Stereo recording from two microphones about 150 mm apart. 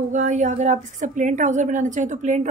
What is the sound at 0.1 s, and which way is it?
A woman's voice, 55° right (ahead or behind).